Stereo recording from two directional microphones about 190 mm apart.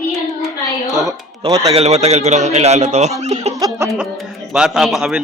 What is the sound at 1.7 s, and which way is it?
Speech, 35° right (ahead or behind).